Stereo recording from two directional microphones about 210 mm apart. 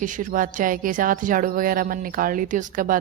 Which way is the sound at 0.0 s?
40° right (ahead or behind).